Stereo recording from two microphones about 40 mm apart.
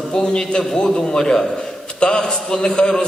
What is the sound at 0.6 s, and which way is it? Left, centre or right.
A man's voice, centre.